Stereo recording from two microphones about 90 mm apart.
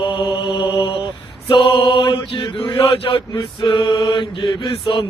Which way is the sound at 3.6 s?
60° left (ahead or behind).